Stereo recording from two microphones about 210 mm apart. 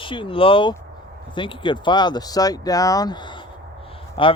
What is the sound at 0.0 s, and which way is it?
Speech, 25° left (ahead or behind).